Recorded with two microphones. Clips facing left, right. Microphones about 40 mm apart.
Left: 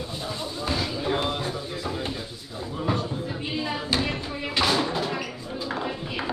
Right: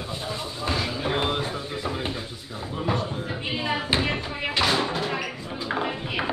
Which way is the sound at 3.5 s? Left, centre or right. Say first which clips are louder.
Right 2 dB; right.